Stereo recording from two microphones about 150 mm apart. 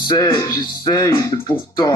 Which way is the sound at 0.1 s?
20° left (ahead or behind).